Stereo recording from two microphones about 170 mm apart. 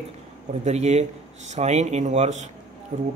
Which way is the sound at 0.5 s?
40° right (ahead or behind).